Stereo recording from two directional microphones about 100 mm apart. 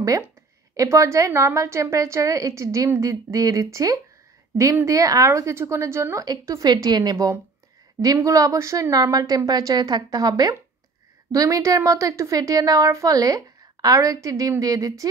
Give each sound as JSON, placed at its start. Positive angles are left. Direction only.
{"t": 0.7, "sound": "a woman's voice", "side_deg": -30}